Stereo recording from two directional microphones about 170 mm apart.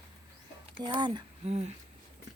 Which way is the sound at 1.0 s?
25° right (ahead or behind).